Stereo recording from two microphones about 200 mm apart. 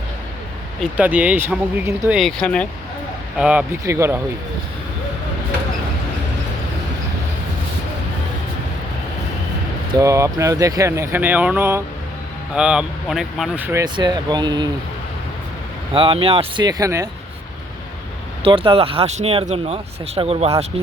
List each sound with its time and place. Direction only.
0.8 s speech: 5° right (ahead or behind)
9.9 s speech: 15° right (ahead or behind)
15.9 s speech: 25° right (ahead or behind)
18.4 s speech: 25° right (ahead or behind)